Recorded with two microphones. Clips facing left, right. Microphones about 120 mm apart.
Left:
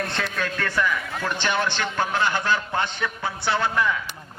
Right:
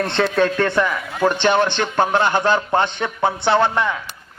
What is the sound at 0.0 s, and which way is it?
Speech, 30° right (ahead or behind).